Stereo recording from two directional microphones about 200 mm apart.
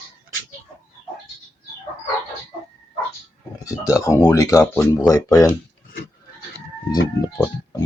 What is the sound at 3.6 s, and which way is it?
Speech, 15° left (ahead or behind).